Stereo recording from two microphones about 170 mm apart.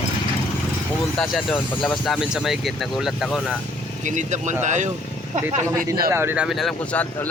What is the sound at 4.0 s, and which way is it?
Speech, 45° right (ahead or behind).